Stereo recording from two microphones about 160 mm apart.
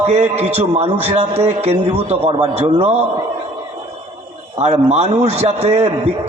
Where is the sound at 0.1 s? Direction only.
40° right (ahead or behind).